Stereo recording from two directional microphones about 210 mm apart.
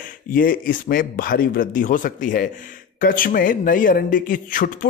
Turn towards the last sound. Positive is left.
turn(degrees=40)  # may be behind; listen again after turning